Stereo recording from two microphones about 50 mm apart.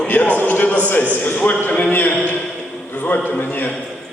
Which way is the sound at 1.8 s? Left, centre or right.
Left.